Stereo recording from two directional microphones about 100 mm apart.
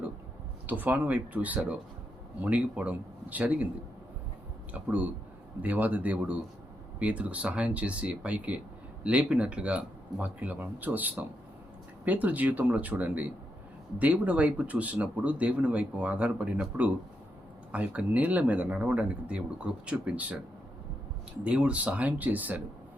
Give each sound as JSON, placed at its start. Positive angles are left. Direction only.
{"t": 0.7, "sound": "speech", "side_deg": -15}
{"t": 4.7, "sound": "speech", "side_deg": -15}
{"t": 21.4, "sound": "speech", "side_deg": -10}